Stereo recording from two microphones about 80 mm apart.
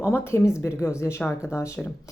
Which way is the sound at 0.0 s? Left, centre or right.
Left.